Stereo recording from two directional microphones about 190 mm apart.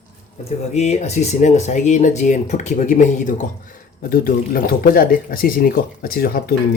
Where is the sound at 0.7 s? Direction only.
35° left (ahead or behind); by 6.6 s 55° left (ahead or behind).